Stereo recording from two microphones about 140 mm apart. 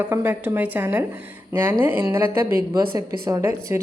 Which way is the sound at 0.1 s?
15° right (ahead or behind).